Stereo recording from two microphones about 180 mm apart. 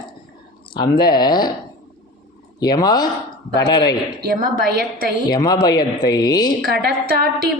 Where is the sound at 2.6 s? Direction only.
20° left (ahead or behind).